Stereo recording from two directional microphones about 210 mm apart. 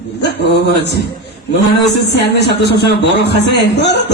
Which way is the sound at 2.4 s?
55° left (ahead or behind).